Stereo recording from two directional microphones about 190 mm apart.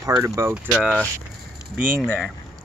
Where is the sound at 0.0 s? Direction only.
15° right (ahead or behind).